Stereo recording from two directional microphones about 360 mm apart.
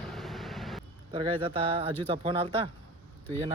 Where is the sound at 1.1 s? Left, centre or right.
Centre.